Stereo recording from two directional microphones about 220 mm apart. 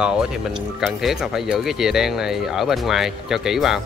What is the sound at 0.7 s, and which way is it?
Speech, centre (ahead or behind).